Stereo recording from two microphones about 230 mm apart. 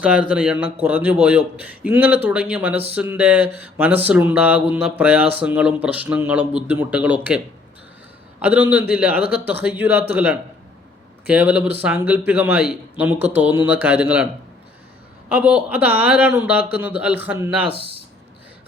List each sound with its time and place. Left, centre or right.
0.0 s a man's voice: centre
15.3 s a man's voice: centre
17.7 s speech: right